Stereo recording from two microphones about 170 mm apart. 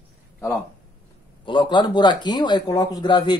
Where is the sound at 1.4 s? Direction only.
30° left (ahead or behind).